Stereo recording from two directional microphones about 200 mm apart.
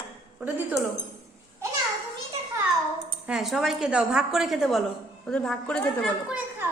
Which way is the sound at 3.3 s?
Centre (ahead or behind).